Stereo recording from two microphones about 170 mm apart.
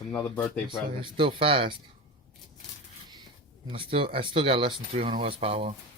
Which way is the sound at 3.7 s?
30° right (ahead or behind).